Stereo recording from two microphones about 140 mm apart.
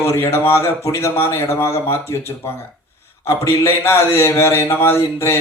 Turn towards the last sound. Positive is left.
turn(degrees=20)  # may be behind; listen again after turning